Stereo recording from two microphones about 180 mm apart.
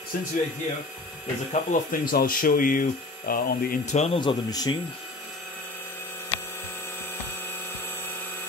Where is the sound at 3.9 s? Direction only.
30° left (ahead or behind).